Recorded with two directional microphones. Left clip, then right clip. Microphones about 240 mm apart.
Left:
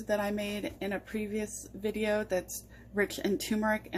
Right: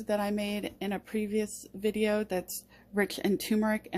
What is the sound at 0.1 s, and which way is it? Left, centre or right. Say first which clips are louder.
Speech: right 1 dB; right.